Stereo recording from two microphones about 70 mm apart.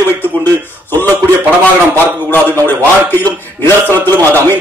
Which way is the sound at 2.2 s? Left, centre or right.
Left.